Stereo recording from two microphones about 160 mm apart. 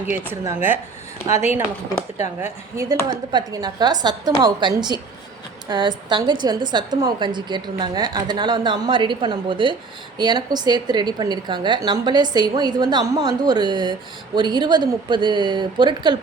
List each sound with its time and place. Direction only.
0.3 s speech: 15° right (ahead or behind)
2.1 s a woman's voice: 20° right (ahead or behind)